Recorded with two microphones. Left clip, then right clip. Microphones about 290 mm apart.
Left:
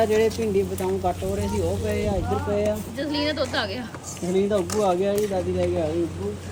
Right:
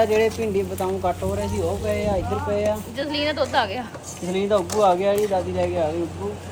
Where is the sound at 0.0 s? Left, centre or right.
Centre.